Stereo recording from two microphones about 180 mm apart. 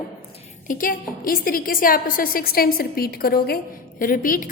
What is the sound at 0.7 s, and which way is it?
A woman's voice, 50° left (ahead or behind).